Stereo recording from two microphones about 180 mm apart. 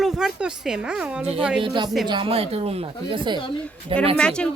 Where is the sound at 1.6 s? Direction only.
25° right (ahead or behind).